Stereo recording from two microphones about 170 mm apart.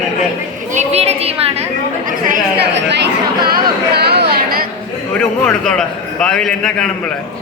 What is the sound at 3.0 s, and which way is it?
Chatter, 65° right (ahead or behind).